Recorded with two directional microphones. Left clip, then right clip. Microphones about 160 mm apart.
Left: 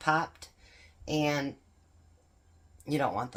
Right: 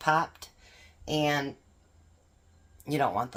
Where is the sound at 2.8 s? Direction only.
20° right (ahead or behind).